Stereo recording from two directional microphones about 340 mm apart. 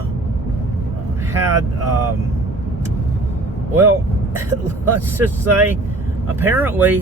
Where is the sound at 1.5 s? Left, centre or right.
Right.